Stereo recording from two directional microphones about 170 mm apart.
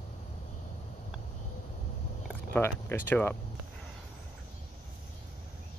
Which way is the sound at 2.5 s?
15° left (ahead or behind).